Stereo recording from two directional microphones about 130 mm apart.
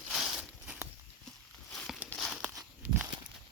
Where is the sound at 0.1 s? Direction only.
Centre (ahead or behind).